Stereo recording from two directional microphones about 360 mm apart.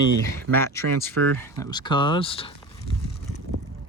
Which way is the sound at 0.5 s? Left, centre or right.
Centre.